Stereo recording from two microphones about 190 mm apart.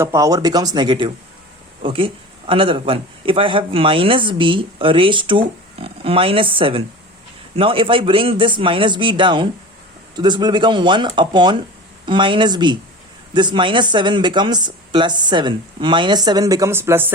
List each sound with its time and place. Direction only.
0.0 s speech: 15° right (ahead or behind)